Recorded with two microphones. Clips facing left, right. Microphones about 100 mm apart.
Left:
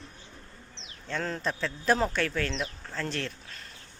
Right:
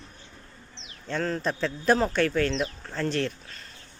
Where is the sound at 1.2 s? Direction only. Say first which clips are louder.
Right 4 dB; 5° left (ahead or behind).